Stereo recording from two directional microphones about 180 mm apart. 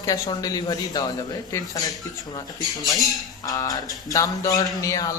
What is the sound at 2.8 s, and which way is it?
Speech, centre (ahead or behind).